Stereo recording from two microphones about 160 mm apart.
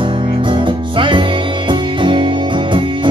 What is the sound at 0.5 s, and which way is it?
Music, 30° right (ahead or behind).